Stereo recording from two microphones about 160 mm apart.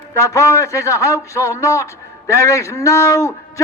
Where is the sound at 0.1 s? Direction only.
20° left (ahead or behind).